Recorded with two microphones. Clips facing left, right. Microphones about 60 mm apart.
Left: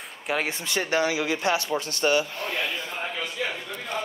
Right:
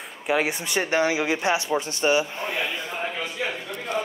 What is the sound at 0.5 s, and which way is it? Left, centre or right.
Speech, centre.